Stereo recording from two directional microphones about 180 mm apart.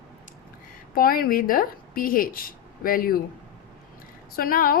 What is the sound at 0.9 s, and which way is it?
A woman's voice, 55° left (ahead or behind).